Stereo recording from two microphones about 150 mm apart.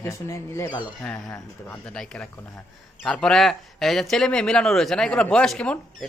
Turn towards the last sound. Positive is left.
turn(degrees=5)  # may be behind; listen again after turning